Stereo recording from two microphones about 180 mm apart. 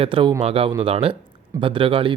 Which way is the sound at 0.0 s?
30° right (ahead or behind).